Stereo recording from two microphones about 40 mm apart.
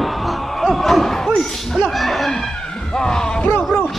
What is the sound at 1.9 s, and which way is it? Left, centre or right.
Speech, centre.